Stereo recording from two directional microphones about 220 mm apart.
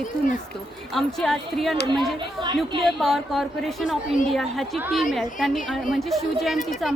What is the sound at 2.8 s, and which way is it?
A woman's voice, centre (ahead or behind).